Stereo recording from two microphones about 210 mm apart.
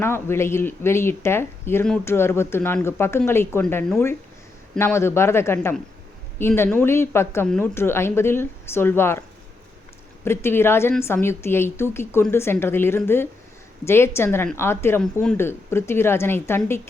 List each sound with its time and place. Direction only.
0.0 s speech: 10° left (ahead or behind)
10.2 s speech: 10° left (ahead or behind)